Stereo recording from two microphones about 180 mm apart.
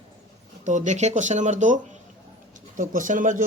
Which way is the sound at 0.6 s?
45° right (ahead or behind).